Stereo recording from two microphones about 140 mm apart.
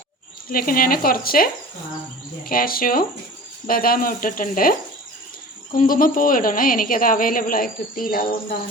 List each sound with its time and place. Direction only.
0.4 s speech: 90° left
5.7 s speech: 80° left